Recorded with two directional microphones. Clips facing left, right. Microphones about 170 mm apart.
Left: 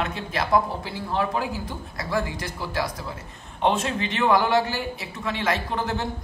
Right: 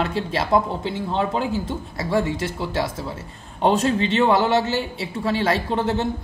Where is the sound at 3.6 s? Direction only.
35° right (ahead or behind).